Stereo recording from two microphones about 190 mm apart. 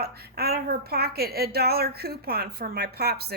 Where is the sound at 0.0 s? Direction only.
55° right (ahead or behind).